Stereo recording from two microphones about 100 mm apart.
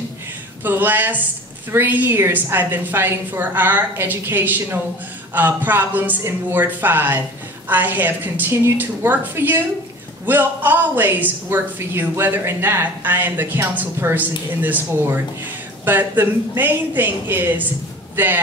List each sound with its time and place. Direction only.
0.7 s a woman's voice: 20° right (ahead or behind)